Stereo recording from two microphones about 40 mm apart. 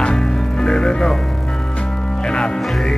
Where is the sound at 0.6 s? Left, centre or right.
Centre.